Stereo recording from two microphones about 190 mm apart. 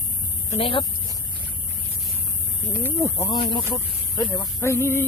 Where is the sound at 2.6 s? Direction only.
10° left (ahead or behind).